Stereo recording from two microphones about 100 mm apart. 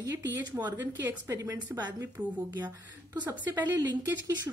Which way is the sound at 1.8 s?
45° right (ahead or behind).